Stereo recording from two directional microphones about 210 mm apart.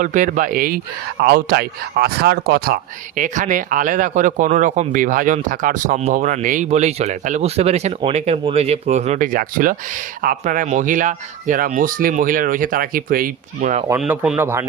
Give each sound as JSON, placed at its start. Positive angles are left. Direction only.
{"t": 0.0, "sound": "speech", "side_deg": -40}
{"t": 14.0, "sound": "speech", "side_deg": -5}